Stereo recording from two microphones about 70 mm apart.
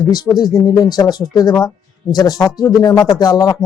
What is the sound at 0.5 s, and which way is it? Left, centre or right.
Speech, left.